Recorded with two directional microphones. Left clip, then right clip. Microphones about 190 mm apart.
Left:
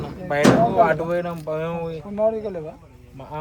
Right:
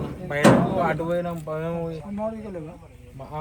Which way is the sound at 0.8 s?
35° left (ahead or behind).